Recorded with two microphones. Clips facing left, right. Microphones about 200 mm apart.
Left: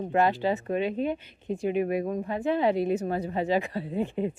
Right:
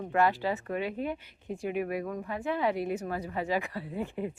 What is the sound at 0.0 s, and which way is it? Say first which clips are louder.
Speech: left 3 dB; 25° left (ahead or behind).